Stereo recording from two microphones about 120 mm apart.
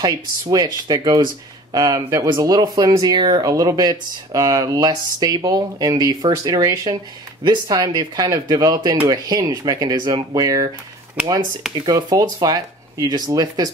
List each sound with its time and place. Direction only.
0.0 s speech: 35° right (ahead or behind)
11.2 s speech: 10° right (ahead or behind)
11.8 s speech: 30° right (ahead or behind)